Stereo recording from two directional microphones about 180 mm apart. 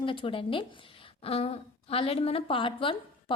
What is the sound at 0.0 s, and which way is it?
A woman's voice, 30° left (ahead or behind).